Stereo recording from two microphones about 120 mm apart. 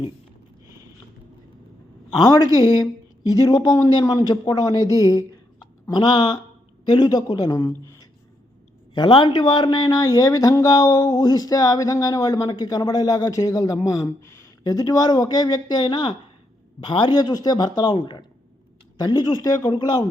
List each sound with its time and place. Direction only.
2.1 s speech: 35° left (ahead or behind)
9.0 s speech: 40° left (ahead or behind)